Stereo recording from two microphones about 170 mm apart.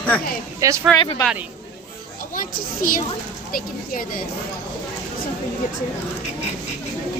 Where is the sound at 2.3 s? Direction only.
55° left (ahead or behind).